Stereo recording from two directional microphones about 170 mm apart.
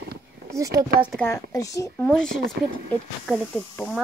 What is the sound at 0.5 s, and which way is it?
Speech, 20° right (ahead or behind).